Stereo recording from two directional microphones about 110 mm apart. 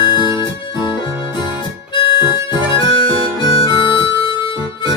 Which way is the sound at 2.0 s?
45° left (ahead or behind).